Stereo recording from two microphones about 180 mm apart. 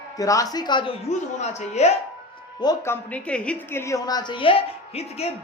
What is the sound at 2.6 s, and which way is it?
A woman's voice, 20° left (ahead or behind).